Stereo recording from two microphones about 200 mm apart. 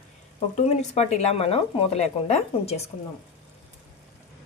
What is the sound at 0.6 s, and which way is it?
Speech, 35° left (ahead or behind).